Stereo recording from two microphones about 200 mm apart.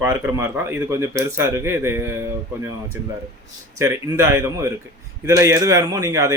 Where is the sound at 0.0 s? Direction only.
15° right (ahead or behind).